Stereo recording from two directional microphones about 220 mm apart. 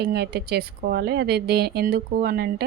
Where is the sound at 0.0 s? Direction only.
45° right (ahead or behind).